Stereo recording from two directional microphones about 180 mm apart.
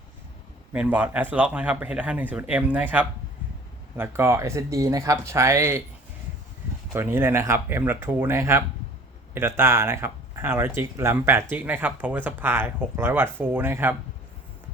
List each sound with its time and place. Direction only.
0.7 s speech: 10° right (ahead or behind)
6.9 s speech: 10° right (ahead or behind)